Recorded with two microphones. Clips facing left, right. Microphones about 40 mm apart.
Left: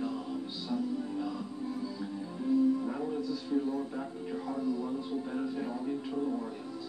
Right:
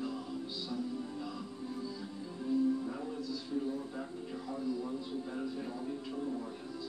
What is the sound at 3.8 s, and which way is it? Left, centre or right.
Speech, centre.